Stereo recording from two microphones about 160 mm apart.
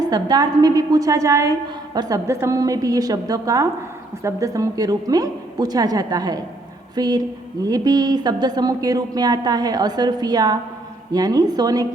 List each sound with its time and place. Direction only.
0.1 s speech: 25° right (ahead or behind)